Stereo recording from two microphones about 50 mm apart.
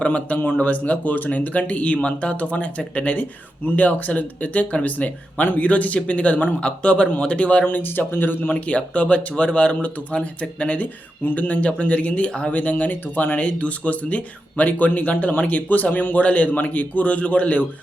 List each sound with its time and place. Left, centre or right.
0.0 s speech: left
8.6 s speech: left